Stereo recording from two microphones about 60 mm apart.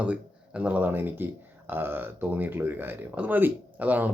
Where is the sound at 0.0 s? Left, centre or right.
Right.